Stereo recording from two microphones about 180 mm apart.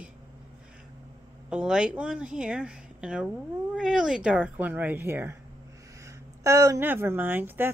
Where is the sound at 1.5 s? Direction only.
5° right (ahead or behind).